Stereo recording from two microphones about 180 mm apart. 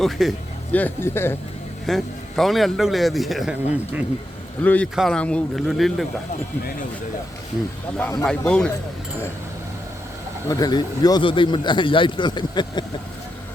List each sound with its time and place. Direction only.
0.0 s speech: centre (ahead or behind)
1.9 s a man's voice: centre (ahead or behind)
4.6 s a man's voice: 10° left (ahead or behind)
8.2 s a man's voice: 5° left (ahead or behind)
10.5 s speech: 20° left (ahead or behind)